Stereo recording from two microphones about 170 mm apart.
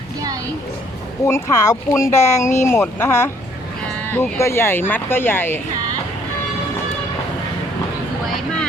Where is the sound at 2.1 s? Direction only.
40° left (ahead or behind).